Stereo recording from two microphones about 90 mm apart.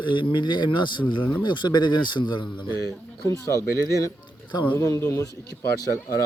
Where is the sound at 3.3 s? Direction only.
35° left (ahead or behind).